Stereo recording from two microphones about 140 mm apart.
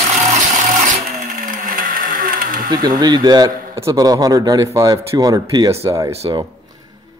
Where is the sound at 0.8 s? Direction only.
65° right (ahead or behind); by 2.7 s 80° right.